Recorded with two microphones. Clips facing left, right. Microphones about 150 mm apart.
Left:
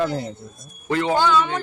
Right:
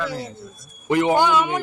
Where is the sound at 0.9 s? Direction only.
15° right (ahead or behind).